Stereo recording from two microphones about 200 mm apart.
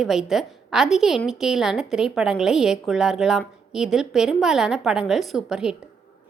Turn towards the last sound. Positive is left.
turn(degrees=-5)  # may be behind; listen again after turning